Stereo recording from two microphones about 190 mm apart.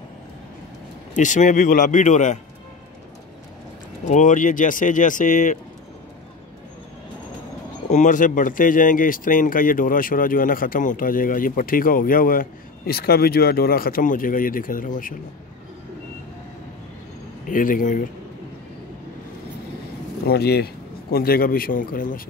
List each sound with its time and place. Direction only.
1.1 s speech: 40° left (ahead or behind)
4.1 s speech: 40° left (ahead or behind)
7.9 s speech: 40° left (ahead or behind)
17.5 s speech: 45° left (ahead or behind)
20.2 s speech: 55° left (ahead or behind)